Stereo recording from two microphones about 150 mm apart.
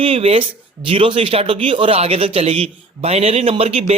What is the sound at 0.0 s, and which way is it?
Speech, 40° right (ahead or behind).